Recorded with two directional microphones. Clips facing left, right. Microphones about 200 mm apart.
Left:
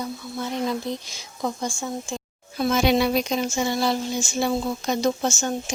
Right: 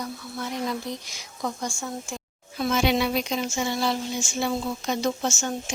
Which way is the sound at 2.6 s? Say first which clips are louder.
Left 3 dB; 40° left (ahead or behind).